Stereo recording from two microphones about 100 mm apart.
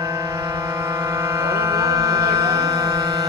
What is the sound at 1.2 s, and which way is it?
Music, 30° right (ahead or behind).